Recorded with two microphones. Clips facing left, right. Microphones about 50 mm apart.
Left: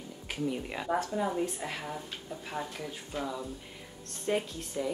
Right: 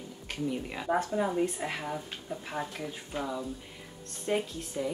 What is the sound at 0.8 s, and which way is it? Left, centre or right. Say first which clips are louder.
Speech: right 2 dB; centre.